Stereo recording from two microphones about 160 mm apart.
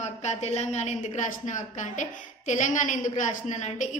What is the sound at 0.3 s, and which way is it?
A woman's voice, 45° left (ahead or behind).